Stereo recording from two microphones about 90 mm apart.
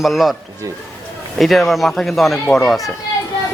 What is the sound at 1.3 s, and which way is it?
A man's voice, centre (ahead or behind).